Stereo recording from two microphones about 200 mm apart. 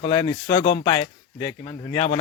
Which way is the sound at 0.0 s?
25° left (ahead or behind).